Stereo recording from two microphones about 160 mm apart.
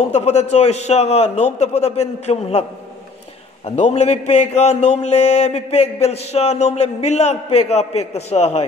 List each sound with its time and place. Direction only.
0.0 s a man's voice: 40° left (ahead or behind)
3.6 s a man's voice: 45° left (ahead or behind)